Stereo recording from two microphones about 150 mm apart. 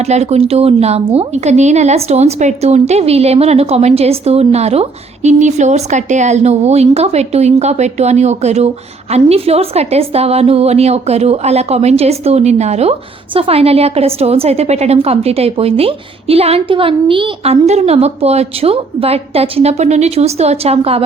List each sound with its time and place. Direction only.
0.0 s a woman's voice: 45° right (ahead or behind)